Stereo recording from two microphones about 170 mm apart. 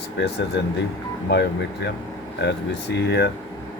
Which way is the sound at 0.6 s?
90° left.